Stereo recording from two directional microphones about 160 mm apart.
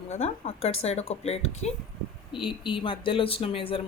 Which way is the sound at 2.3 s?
30° left (ahead or behind).